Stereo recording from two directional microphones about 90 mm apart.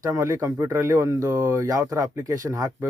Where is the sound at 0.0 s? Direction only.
35° right (ahead or behind).